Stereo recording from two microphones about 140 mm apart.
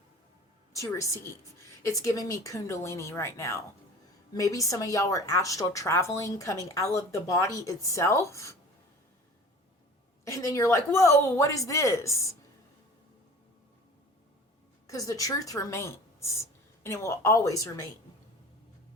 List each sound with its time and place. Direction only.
0.8 s a woman's voice: 20° left (ahead or behind)
10.2 s a woman's voice: 20° left (ahead or behind)
14.8 s speech: 25° left (ahead or behind)